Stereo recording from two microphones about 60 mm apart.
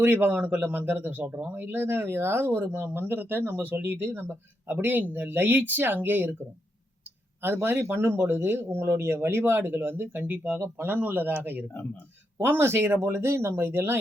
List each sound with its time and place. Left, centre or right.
0.0 s speech: right
7.4 s speech: right